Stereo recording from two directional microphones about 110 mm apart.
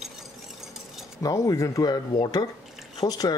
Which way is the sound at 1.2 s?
30° left (ahead or behind).